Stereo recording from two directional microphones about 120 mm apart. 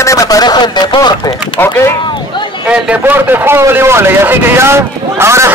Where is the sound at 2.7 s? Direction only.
15° right (ahead or behind).